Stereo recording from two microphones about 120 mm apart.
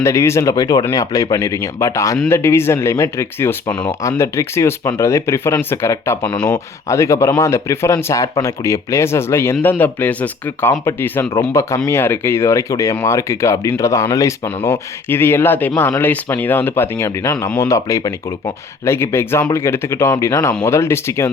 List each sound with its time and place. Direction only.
0.0 s speech: 25° left (ahead or behind)
6.2 s speech: 10° left (ahead or behind)
6.8 s speech: 25° left (ahead or behind)
18.9 s speech: 20° left (ahead or behind)